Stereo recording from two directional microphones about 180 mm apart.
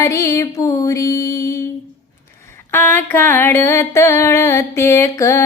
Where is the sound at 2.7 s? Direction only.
10° left (ahead or behind).